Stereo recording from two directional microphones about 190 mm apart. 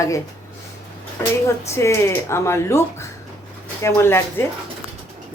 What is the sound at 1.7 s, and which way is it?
A woman's voice, 15° left (ahead or behind).